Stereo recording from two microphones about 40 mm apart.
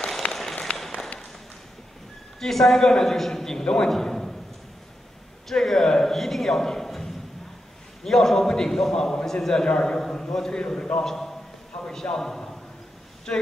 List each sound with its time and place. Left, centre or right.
0.2 s a sound: left
2.4 s a man's voice: centre
5.5 s a man's voice: centre